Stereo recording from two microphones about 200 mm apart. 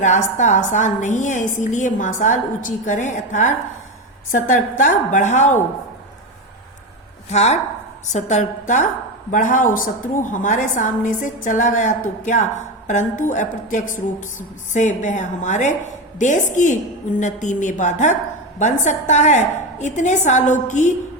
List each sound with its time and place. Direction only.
0.0 s a woman's voice: 35° left (ahead or behind)
7.3 s a woman's voice: 35° left (ahead or behind)